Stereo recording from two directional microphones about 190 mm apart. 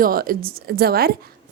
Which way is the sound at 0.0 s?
50° right (ahead or behind).